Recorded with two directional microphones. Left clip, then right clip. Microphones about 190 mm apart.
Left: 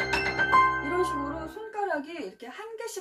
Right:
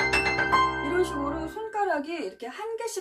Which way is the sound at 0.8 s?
Centre (ahead or behind).